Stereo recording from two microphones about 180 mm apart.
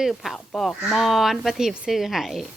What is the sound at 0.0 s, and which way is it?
Speech, centre (ahead or behind).